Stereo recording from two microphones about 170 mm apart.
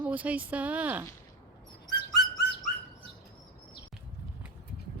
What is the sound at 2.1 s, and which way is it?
Music, 70° left (ahead or behind).